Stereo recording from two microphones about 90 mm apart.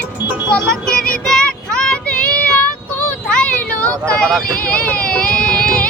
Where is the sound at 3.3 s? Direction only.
15° left (ahead or behind).